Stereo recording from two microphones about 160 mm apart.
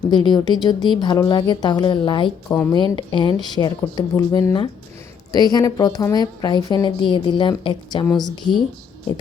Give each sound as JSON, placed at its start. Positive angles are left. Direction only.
{"t": 0.1, "sound": "a woman's voice", "side_deg": 30}
{"t": 2.5, "sound": "speech", "side_deg": 15}
{"t": 2.7, "sound": "a woman's voice", "side_deg": 30}